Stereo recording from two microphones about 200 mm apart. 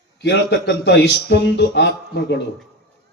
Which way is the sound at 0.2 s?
60° left (ahead or behind).